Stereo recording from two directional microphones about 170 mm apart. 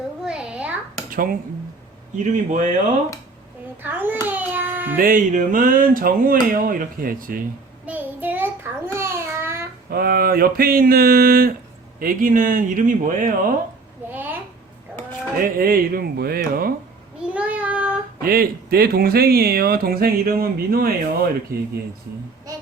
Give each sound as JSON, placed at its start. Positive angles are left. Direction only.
{"t": 0.3, "sound": "a sound", "side_deg": -5}
{"t": 1.1, "sound": "speech", "side_deg": -60}
{"t": 2.1, "sound": "a man's voice", "side_deg": -45}
{"t": 3.8, "sound": "a child's voice", "side_deg": -10}
{"t": 4.3, "sound": "a sound", "side_deg": -10}
{"t": 4.9, "sound": "speech", "side_deg": -55}
{"t": 7.9, "sound": "child singing", "side_deg": -10}
{"t": 8.9, "sound": "a child's voice", "side_deg": -15}
{"t": 9.9, "sound": "a man's voice", "side_deg": -60}
{"t": 14.1, "sound": "a sound", "side_deg": -10}
{"t": 15.5, "sound": "speech", "side_deg": -60}
{"t": 17.2, "sound": "child singing", "side_deg": -5}
{"t": 18.2, "sound": "speech", "side_deg": -60}